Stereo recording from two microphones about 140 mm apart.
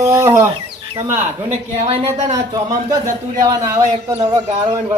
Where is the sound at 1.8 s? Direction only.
45° right (ahead or behind).